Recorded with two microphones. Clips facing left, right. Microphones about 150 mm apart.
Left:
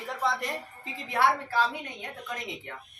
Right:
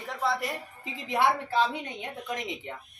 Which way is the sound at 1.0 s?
20° right (ahead or behind).